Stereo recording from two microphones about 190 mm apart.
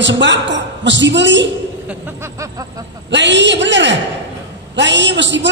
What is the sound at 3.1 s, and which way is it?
A man's voice, 70° right (ahead or behind).